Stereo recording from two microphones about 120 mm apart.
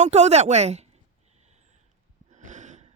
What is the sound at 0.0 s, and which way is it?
Speech, 70° right (ahead or behind).